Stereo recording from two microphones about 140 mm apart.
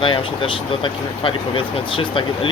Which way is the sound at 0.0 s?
35° left (ahead or behind).